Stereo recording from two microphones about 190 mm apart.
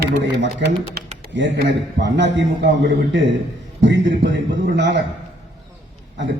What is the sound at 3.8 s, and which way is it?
A man's voice, 70° right (ahead or behind).